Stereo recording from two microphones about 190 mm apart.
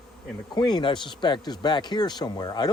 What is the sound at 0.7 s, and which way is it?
Speech, 25° left (ahead or behind).